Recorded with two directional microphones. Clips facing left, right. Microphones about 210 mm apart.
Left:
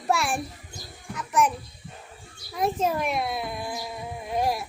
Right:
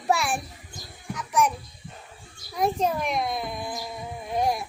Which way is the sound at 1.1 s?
Centre (ahead or behind).